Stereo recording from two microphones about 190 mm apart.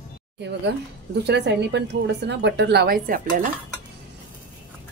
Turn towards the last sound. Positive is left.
turn(degrees=-45)  # may be behind; listen again after turning